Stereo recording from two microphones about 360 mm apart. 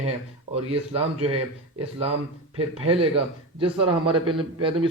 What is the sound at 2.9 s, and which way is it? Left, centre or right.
A man's voice, centre.